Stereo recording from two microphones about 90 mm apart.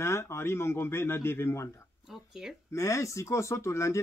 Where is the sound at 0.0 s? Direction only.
30° left (ahead or behind).